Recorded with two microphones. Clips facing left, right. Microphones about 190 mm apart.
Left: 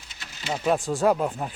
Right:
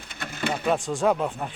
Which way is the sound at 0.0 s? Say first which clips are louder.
Right 9 dB; 55° right (ahead or behind).